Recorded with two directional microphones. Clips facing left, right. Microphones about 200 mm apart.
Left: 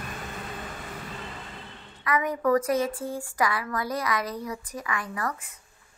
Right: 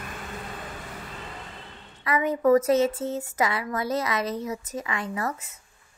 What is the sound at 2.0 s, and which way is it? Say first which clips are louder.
A woman's voice: right 4 dB; 25° right (ahead or behind).